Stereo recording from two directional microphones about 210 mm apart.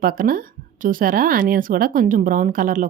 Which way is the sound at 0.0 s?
45° right (ahead or behind).